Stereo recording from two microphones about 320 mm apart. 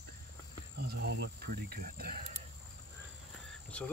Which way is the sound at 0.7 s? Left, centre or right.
Right.